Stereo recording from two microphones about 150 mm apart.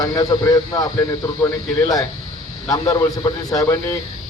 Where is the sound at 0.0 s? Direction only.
25° left (ahead or behind).